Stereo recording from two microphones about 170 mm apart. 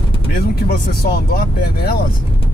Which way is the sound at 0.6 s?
60° left (ahead or behind).